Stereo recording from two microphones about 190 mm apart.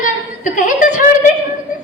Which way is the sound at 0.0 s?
45° left (ahead or behind).